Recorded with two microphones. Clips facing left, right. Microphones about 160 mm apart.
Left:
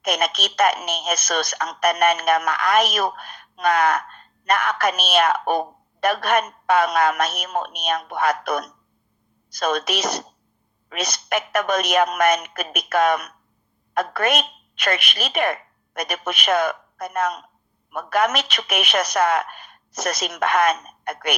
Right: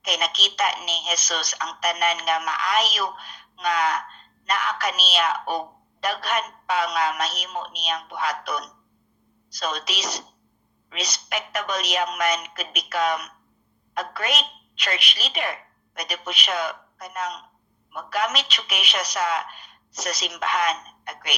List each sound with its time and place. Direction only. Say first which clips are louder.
0.0 s a woman's voice: left 5 dB; 50° left (ahead or behind)